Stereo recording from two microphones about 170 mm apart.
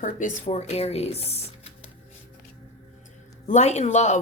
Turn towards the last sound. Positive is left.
turn(degrees=45)  # may be behind; listen again after turning